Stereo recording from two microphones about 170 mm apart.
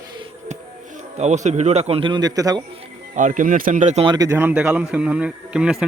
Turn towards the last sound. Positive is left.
turn(degrees=-5)  # may be behind; listen again after turning